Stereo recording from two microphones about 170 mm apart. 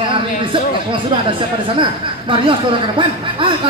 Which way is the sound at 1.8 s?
30° right (ahead or behind).